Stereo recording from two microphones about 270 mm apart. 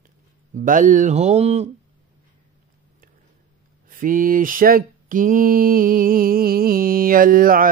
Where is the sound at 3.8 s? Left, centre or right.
Right.